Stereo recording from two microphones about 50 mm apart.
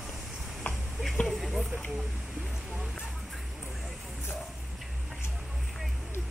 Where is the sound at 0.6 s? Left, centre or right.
Left.